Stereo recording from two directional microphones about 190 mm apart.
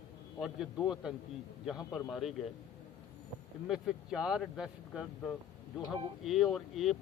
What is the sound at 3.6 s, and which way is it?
Speech, 5° right (ahead or behind).